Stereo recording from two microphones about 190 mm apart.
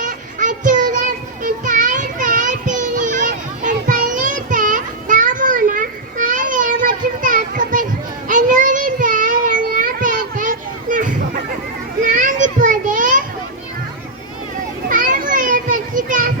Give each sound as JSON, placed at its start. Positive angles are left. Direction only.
{"t": 0.0, "sound": "music", "side_deg": -40}
{"t": 8.3, "sound": "a sound", "side_deg": -45}
{"t": 12.0, "sound": "children playing", "side_deg": -45}
{"t": 14.8, "sound": "children playing", "side_deg": -45}